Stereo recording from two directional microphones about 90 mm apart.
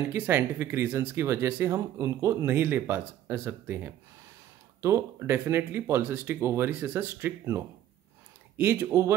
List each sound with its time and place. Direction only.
0.1 s speech: 25° right (ahead or behind)
8.5 s speech: 20° right (ahead or behind)